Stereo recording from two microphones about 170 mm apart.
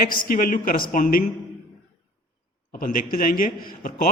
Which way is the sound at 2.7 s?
55° left (ahead or behind).